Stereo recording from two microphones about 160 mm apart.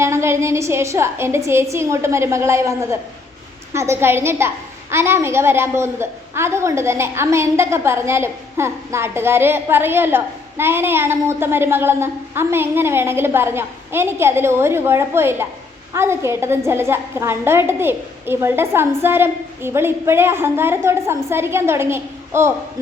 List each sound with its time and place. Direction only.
0.0 s a woman's voice: 15° right (ahead or behind)